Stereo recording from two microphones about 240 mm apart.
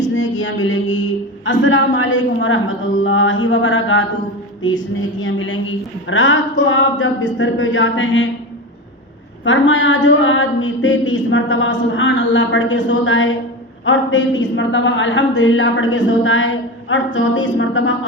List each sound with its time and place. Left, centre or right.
0.1 s a sound: left
1.5 s a woman's voice: left
5.2 s a woman's voice: left
9.4 s a woman's voice: left
16.0 s a sound: left
17.2 s a woman's voice: left